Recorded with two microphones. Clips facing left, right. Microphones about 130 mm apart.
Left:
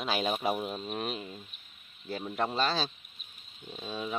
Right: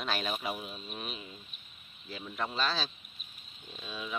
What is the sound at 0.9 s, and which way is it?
Speech, 55° left (ahead or behind).